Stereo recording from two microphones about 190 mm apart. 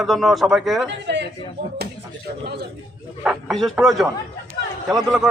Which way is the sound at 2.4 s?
60° right (ahead or behind).